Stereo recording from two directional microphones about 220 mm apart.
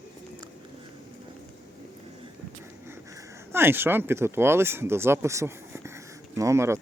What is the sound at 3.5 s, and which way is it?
Speech, 10° right (ahead or behind).